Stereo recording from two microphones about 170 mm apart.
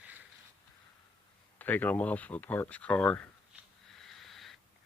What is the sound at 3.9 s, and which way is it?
Sniff, centre (ahead or behind).